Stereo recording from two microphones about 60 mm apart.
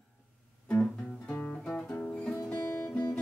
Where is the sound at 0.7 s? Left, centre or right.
Centre.